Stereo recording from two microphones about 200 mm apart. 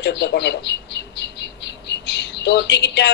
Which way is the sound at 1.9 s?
60° left (ahead or behind).